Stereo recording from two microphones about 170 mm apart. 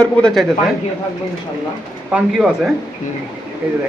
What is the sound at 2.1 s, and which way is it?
Speech, centre (ahead or behind).